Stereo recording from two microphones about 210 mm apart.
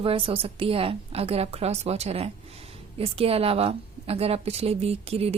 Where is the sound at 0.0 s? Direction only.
25° right (ahead or behind).